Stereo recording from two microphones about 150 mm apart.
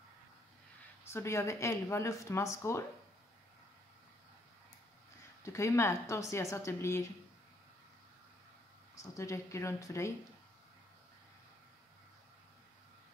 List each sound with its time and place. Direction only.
1.1 s speech: 20° left (ahead or behind)
5.4 s speech: 20° left (ahead or behind)
8.9 s speech: 20° left (ahead or behind)